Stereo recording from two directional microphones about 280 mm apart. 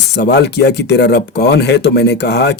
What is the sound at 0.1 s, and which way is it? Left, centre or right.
Speech, left.